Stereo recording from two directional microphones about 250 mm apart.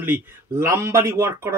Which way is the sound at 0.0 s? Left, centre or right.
Centre.